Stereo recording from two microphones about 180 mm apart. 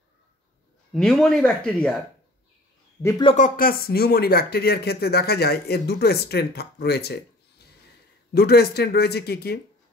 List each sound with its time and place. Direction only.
0.9 s speech: 5° left (ahead or behind)
3.0 s speech: 15° left (ahead or behind)
3.3 s speech: 50° left (ahead or behind); by 7.2 s 65° left (ahead or behind)
8.3 s speech: 60° left (ahead or behind)